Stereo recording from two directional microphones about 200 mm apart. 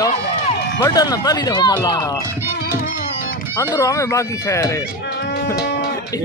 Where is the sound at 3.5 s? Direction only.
15° left (ahead or behind).